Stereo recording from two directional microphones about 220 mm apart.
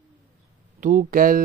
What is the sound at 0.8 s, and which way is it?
Mantra, 35° right (ahead or behind).